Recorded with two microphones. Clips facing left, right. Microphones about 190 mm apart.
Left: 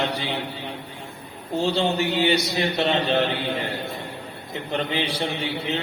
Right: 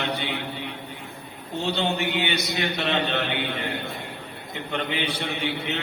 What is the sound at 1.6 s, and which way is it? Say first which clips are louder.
A man's voice: left 3 dB; 35° left (ahead or behind).